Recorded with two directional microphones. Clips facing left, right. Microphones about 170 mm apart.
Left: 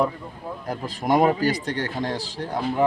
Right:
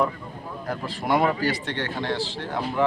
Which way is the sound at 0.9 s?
40° left (ahead or behind).